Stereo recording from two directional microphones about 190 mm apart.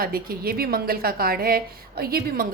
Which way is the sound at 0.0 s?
50° right (ahead or behind).